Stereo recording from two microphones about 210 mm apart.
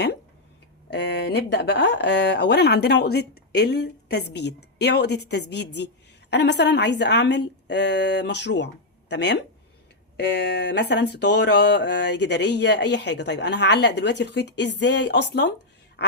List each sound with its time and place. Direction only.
0.9 s speech: 55° left (ahead or behind)
16.0 s quack: 50° left (ahead or behind)